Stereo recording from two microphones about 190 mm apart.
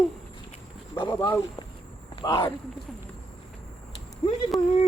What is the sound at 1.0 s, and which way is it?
Speech, 15° left (ahead or behind).